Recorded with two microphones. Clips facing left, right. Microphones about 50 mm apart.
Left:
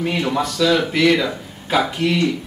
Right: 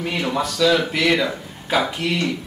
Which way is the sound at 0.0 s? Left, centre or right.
Centre.